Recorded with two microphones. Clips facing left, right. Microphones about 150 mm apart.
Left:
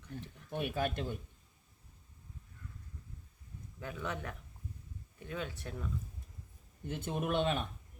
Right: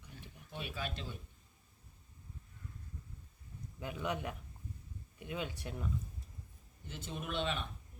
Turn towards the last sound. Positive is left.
turn(degrees=45)  # may be behind; listen again after turning